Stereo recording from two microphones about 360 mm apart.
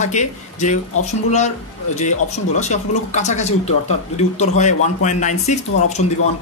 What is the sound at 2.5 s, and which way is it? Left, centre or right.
Speech, centre.